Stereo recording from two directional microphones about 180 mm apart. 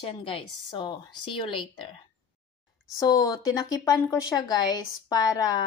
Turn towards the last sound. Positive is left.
turn(degrees=20)  # may be behind; listen again after turning